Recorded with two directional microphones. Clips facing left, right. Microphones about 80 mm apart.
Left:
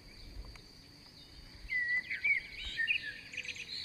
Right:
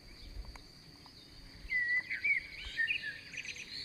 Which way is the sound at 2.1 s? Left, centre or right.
Right.